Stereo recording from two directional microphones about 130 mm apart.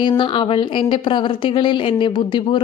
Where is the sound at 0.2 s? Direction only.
40° left (ahead or behind).